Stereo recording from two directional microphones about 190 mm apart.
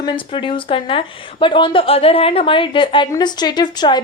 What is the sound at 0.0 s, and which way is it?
A woman's voice, 25° left (ahead or behind).